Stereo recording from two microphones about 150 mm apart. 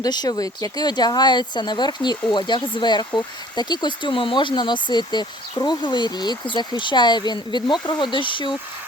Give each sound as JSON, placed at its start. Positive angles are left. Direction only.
{"t": 0.0, "sound": "speech", "side_deg": 25}